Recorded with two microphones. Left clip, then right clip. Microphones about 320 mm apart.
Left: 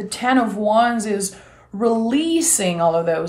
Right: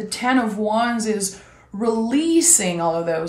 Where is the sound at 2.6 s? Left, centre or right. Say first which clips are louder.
Left 3 dB; centre.